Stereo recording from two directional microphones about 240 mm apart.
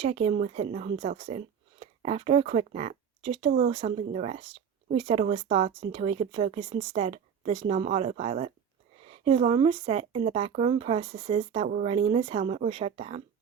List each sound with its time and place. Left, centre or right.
0.0 s a woman's voice: right